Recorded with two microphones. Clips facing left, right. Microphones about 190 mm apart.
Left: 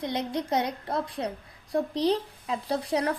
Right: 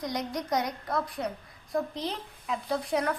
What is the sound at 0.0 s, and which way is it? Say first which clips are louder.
A woman's voice: left 3 dB; 25° left (ahead or behind).